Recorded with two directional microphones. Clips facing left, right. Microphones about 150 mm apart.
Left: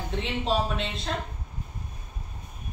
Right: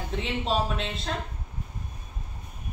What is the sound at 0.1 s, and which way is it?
Speech, centre (ahead or behind).